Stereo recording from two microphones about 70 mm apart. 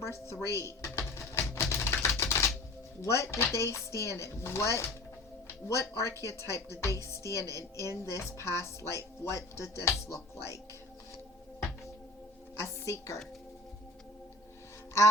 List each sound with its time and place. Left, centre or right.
0.0 s speech: left
0.9 s music: left
3.0 s speech: left
12.6 s a woman's voice: left